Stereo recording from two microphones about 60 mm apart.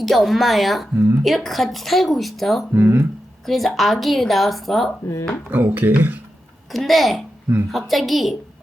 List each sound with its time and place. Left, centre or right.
0.0 s speech: centre
0.9 s speech: right
1.2 s speech: centre
2.7 s speech: right
3.4 s speech: centre
5.5 s speech: right
6.7 s speech: centre